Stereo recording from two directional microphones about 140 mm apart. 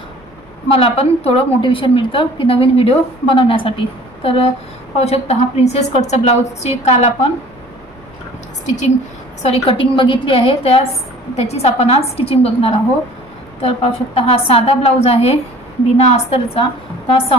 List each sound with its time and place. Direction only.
0.7 s a woman's voice: 45° left (ahead or behind)
9.4 s a woman's voice: 45° left (ahead or behind)